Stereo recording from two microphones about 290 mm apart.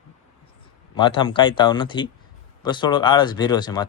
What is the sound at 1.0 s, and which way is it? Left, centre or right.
Speech, centre.